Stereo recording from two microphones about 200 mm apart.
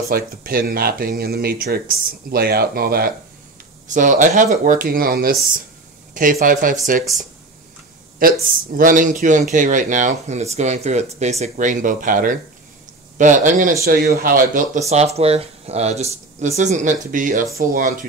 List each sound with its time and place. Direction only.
0.1 s speech: 45° right (ahead or behind)
8.2 s speech: 45° right (ahead or behind)